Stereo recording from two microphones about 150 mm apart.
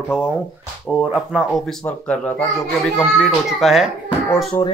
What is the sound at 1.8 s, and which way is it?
Speech, 10° left (ahead or behind).